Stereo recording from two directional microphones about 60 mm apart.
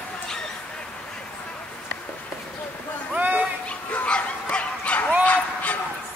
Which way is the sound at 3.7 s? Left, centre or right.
Centre.